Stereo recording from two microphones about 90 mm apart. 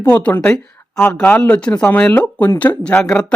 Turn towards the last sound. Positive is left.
turn(degrees=20)  # may be behind; listen again after turning